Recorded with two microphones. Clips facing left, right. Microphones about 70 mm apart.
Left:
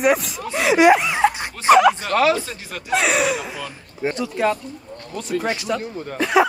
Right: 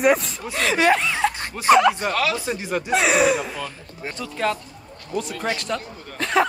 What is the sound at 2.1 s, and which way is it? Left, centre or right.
Speech, left.